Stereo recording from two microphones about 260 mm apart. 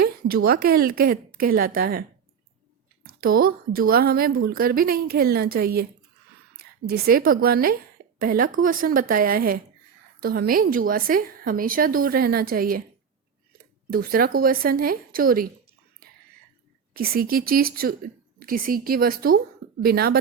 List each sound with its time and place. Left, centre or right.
0.0 s a woman's voice: right
13.9 s a woman's voice: right
16.9 s a woman's voice: right